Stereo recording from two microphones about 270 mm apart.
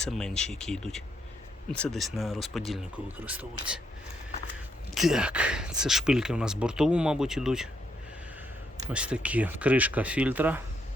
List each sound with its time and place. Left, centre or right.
0.0 s speech: centre
4.9 s speech: centre
8.9 s speech: centre